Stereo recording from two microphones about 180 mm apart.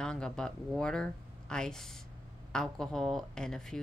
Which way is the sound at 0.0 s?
5° left (ahead or behind).